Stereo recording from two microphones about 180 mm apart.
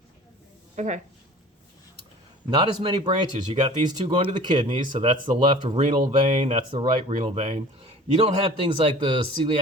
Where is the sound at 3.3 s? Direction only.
40° right (ahead or behind).